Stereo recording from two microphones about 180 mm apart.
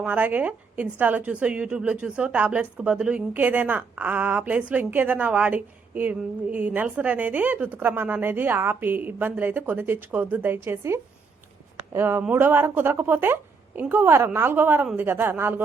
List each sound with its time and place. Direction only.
0.0 s a woman's voice: 10° right (ahead or behind)